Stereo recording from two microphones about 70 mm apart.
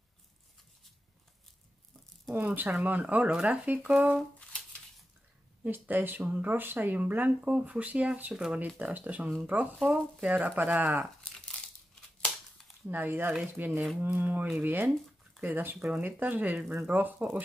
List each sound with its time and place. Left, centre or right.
2.3 s speech: right
4.4 s a sound: centre
5.6 s speech: right
11.2 s crumpling: centre
12.8 s speech: right